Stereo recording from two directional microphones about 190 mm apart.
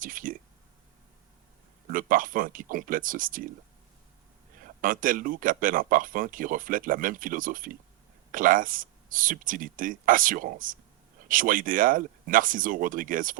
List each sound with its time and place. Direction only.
0.0 s speech: 45° right (ahead or behind)
1.9 s speech: 45° right (ahead or behind)
4.6 s speech: 45° right (ahead or behind)